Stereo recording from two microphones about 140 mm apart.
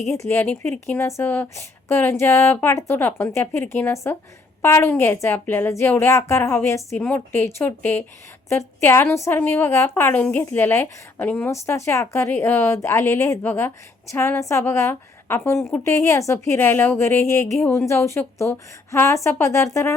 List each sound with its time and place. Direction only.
0.3 s a woman's voice: 15° left (ahead or behind)